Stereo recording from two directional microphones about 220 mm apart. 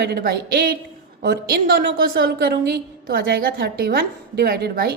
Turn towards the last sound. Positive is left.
turn(degrees=-45)  # may be behind; listen again after turning